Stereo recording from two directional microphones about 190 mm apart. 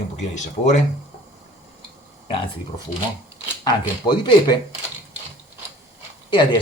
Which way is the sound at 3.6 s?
25° left (ahead or behind).